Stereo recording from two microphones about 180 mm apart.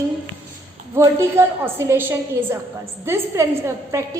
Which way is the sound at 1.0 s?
15° right (ahead or behind).